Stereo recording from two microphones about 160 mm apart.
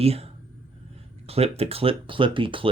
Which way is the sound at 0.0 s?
40° right (ahead or behind).